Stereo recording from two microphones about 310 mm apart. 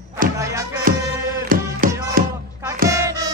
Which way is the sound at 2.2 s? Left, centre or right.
Right.